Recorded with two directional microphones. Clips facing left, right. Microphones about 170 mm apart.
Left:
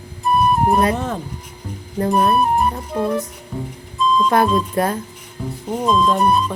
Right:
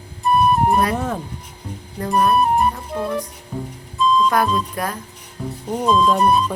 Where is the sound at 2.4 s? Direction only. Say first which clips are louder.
Even; centre (ahead or behind).